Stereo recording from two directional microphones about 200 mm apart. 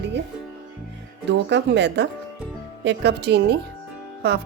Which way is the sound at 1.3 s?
60° right (ahead or behind).